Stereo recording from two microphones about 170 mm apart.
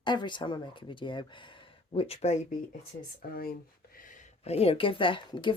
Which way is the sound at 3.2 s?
60° left (ahead or behind).